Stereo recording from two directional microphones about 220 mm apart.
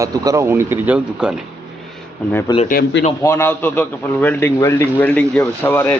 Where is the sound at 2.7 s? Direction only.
45° left (ahead or behind).